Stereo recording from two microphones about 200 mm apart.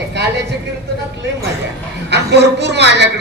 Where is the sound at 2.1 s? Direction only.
55° right (ahead or behind).